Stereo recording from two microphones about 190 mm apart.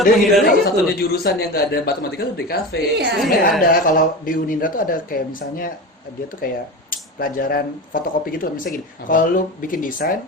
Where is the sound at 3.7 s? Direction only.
45° left (ahead or behind).